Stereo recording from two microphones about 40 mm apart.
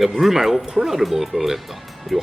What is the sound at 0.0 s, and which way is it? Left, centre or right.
Speech, centre.